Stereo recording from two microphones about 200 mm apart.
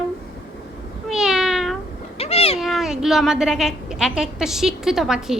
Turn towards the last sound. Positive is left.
turn(degrees=-5)  # may be behind; listen again after turning